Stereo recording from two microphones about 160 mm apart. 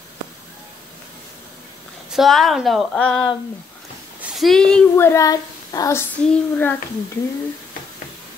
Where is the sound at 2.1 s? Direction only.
Centre (ahead or behind).